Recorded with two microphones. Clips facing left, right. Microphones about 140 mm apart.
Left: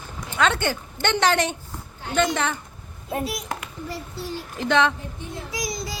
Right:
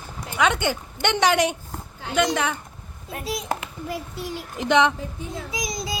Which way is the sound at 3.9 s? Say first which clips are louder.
Right 2 dB; 15° right (ahead or behind).